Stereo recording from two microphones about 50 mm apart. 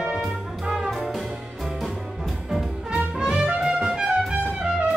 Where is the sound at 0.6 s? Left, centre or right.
Centre.